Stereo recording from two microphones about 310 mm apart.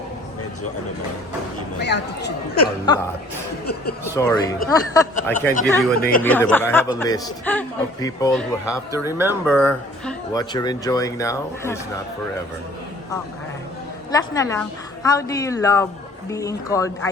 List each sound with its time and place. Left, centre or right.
1.8 s speech: left
4.0 s a woman's voice: centre
6.0 s speech: left
6.2 s a woman's voice: centre
10.3 s a woman's voice: centre
14.1 s a woman's voice: centre